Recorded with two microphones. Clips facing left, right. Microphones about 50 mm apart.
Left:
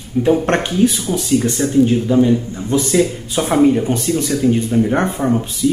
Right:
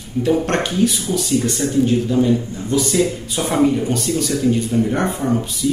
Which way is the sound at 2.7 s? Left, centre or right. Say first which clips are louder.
Left 2 dB; left.